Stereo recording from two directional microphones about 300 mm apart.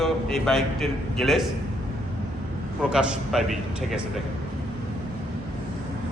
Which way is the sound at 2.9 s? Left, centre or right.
Centre.